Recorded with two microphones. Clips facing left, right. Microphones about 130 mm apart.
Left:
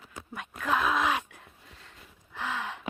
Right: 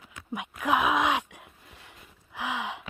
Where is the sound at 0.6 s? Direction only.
15° right (ahead or behind).